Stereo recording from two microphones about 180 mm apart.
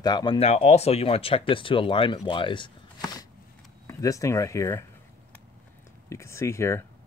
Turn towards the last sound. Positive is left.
turn(degrees=15)  # may be behind; listen again after turning